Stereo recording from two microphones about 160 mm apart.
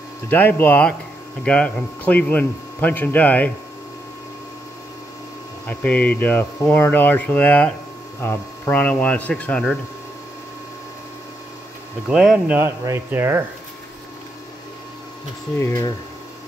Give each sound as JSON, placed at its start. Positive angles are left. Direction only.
{"t": 0.3, "sound": "speech", "side_deg": 10}
{"t": 5.7, "sound": "speech", "side_deg": 10}
{"t": 12.1, "sound": "speech", "side_deg": -5}
{"t": 12.5, "sound": "speech", "side_deg": -15}
{"t": 15.6, "sound": "speech", "side_deg": 20}